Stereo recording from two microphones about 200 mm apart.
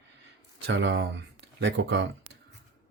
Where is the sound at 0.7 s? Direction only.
60° right (ahead or behind).